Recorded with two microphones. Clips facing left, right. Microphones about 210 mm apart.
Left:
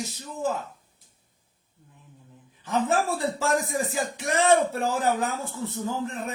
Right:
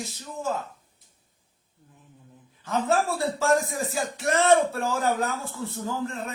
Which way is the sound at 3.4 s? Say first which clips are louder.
Right 5 dB; 15° left (ahead or behind).